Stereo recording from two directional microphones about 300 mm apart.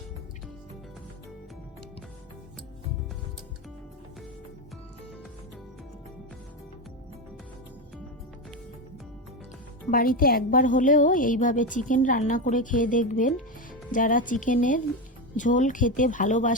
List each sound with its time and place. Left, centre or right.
9.9 s a woman's voice: left